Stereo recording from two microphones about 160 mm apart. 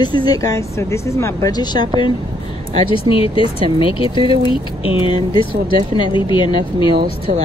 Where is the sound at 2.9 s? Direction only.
35° left (ahead or behind).